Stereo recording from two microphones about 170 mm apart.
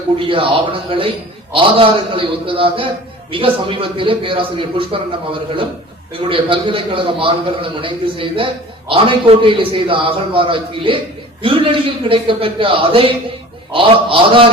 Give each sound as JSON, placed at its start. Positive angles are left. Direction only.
{"t": 0.2, "sound": "a man's voice", "side_deg": -30}